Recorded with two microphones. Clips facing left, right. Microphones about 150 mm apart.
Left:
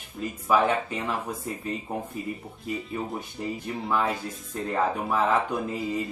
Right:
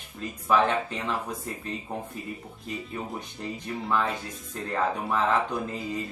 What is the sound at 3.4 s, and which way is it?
Speech, 5° left (ahead or behind).